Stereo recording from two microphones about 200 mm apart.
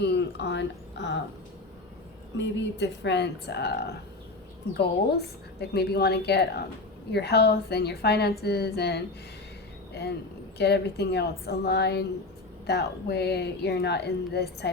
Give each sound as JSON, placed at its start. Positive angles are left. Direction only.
{"t": 0.0, "sound": "speech", "side_deg": 55}
{"t": 2.4, "sound": "speech", "side_deg": 60}
{"t": 5.1, "sound": "a woman's voice", "side_deg": 55}